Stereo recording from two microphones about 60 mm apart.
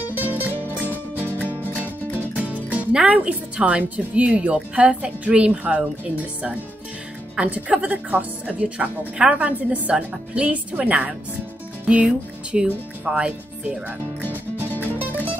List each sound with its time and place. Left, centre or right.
0.1 s music: right
3.1 s speech: right